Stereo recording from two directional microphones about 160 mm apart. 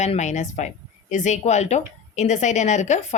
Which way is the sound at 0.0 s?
45° left (ahead or behind).